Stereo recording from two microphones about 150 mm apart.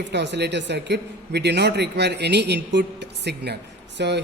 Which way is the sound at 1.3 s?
90° right.